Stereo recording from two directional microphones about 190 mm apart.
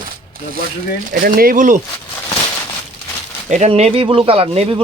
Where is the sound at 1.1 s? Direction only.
50° right (ahead or behind).